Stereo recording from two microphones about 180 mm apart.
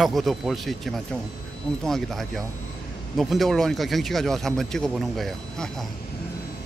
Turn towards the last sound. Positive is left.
turn(degrees=0)  # may be behind; listen again after turning